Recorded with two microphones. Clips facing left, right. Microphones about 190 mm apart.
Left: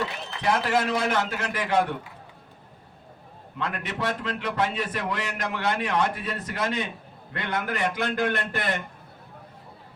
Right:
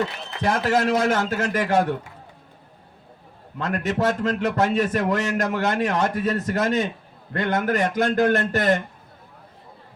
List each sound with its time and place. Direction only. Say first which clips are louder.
0.4 s a man's voice: right 3 dB; 45° right (ahead or behind)
3.6 s a man's voice: right 7 dB; 45° right (ahead or behind)